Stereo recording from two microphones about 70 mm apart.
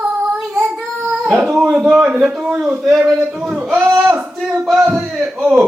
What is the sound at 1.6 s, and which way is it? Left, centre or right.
A man's voice, centre.